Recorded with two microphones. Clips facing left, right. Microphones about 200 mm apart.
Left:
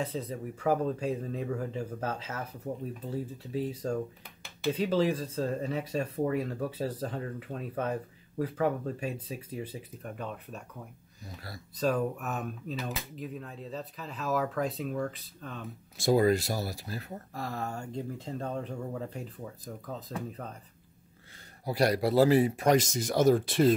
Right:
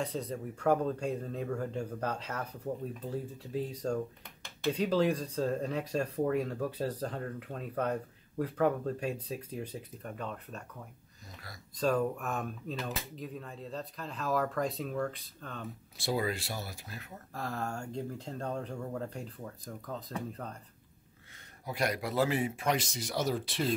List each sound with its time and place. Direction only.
0.0 s speech: 5° left (ahead or behind)
11.8 s speech: 5° left (ahead or behind)
16.0 s speech: 45° left (ahead or behind)
17.3 s speech: centre (ahead or behind)
21.6 s speech: 35° left (ahead or behind); by 23.7 s 50° left (ahead or behind)